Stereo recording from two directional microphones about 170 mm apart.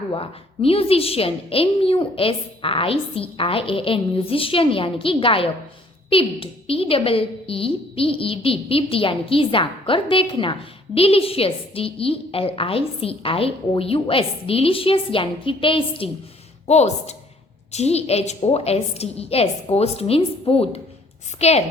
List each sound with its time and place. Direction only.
0.1 s a woman's voice: 35° left (ahead or behind)